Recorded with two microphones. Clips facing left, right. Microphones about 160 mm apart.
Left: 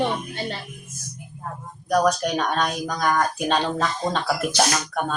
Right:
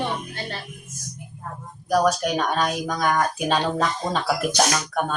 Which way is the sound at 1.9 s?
Centre (ahead or behind).